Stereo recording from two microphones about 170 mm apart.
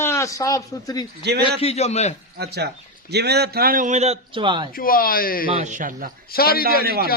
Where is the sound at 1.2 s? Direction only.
75° right (ahead or behind).